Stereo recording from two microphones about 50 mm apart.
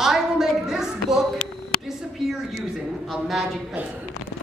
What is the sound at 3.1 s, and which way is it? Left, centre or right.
Speech, centre.